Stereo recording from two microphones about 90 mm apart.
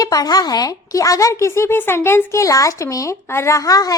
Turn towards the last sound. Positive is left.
turn(degrees=40)  # may be behind; listen again after turning